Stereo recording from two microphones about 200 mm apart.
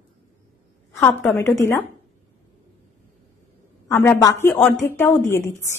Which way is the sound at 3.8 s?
15° left (ahead or behind).